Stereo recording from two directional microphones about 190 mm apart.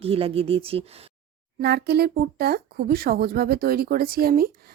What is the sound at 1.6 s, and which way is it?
A woman's voice, 60° right (ahead or behind).